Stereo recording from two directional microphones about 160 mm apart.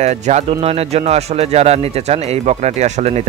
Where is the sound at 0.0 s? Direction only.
45° right (ahead or behind).